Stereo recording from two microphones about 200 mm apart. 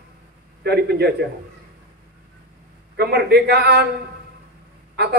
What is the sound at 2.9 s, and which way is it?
Speech, 55° right (ahead or behind).